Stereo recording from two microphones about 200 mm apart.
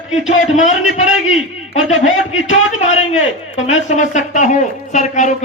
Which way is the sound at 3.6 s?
35° left (ahead or behind).